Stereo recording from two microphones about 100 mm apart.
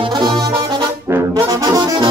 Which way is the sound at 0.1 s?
50° right (ahead or behind).